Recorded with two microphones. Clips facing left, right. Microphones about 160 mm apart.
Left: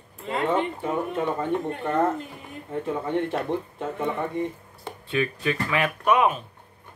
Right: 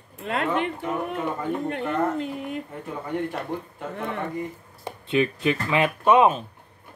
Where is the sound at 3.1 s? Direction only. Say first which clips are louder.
Left 1 dB; 25° left (ahead or behind).